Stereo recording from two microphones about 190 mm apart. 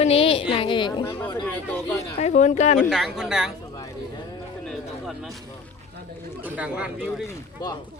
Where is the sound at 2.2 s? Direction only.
40° left (ahead or behind).